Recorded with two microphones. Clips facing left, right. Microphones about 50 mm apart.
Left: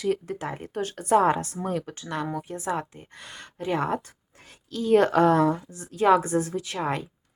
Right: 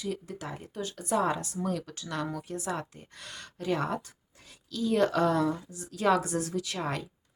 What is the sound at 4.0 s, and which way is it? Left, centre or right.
A woman's voice, left.